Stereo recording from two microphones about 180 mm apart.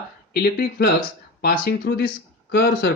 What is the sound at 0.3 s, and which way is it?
Speech, 60° left (ahead or behind).